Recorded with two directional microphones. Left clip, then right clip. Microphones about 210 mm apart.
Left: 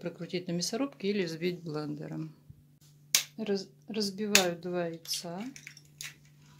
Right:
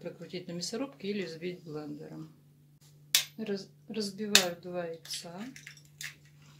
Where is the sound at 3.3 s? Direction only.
45° left (ahead or behind).